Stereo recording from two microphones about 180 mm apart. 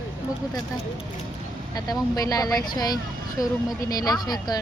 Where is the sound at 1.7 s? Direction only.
20° left (ahead or behind).